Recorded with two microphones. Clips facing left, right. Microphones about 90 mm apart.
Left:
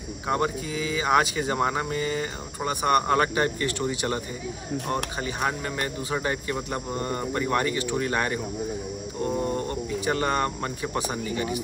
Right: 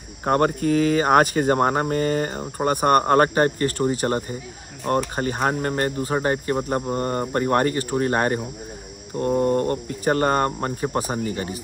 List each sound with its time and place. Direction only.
0.2 s speech: 50° right (ahead or behind)